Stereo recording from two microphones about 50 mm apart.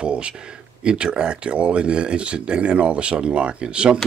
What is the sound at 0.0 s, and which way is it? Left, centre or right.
Speech, right.